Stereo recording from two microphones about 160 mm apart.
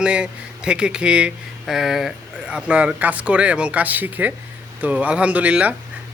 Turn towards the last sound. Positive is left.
turn(degrees=-10)  # may be behind; listen again after turning